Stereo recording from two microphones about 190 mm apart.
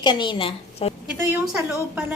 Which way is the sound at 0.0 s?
25° left (ahead or behind).